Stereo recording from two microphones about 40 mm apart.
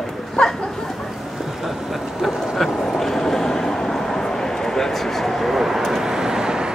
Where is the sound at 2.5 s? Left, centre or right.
Centre.